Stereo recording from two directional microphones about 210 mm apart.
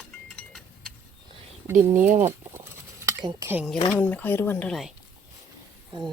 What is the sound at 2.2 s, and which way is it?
Bird, 10° right (ahead or behind).